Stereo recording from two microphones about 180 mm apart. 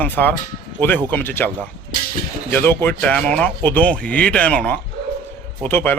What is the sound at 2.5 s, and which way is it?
Speech, 10° left (ahead or behind).